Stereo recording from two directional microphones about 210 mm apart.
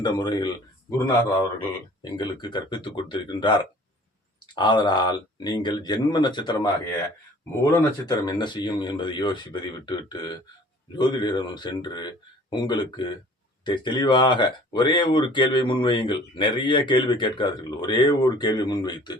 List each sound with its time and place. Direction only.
0.0 s speech: 20° left (ahead or behind)